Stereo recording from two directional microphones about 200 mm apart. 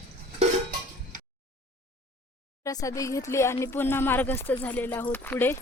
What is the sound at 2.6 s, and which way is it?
Speech, 15° left (ahead or behind).